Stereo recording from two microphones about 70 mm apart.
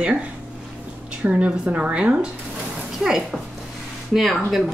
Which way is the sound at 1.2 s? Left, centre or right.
Centre.